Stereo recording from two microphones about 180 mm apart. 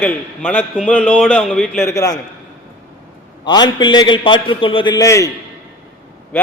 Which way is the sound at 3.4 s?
25° left (ahead or behind).